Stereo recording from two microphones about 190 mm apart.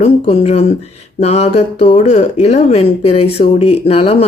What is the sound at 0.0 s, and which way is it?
Speech, 35° left (ahead or behind).